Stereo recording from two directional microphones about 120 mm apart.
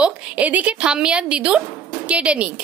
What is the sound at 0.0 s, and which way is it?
A woman's voice, 10° right (ahead or behind).